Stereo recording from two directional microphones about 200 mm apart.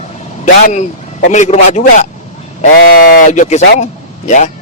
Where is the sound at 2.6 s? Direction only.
50° left (ahead or behind); by 4.5 s 35° left (ahead or behind).